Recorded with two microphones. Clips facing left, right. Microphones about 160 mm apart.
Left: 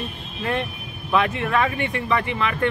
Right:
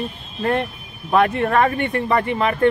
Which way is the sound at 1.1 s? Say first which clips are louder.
Right 4 dB; 50° right (ahead or behind).